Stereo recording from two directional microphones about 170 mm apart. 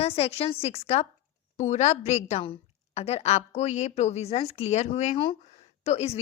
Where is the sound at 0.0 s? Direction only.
35° left (ahead or behind).